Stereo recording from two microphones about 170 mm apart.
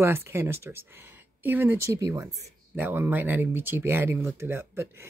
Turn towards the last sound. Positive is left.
turn(degrees=-15)  # may be behind; listen again after turning